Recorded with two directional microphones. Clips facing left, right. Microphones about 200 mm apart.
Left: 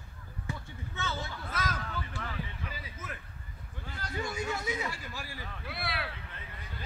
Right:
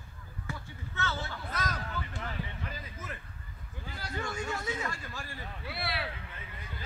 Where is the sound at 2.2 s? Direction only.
20° right (ahead or behind).